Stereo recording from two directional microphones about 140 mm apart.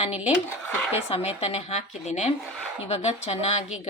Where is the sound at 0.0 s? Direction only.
50° left (ahead or behind).